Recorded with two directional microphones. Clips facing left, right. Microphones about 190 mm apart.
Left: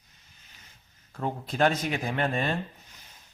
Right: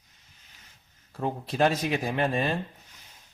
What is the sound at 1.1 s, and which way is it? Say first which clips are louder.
Speech: right 1 dB; 10° right (ahead or behind).